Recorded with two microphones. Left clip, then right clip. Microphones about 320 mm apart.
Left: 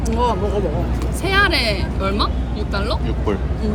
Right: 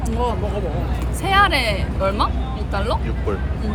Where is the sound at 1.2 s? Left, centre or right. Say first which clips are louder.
Right 1 dB; centre.